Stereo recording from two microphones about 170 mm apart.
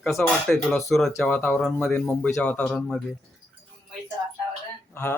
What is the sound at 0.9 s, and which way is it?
Speech, centre (ahead or behind).